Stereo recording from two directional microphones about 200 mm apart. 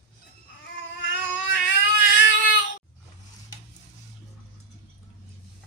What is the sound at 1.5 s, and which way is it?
Baby cry, 65° left (ahead or behind).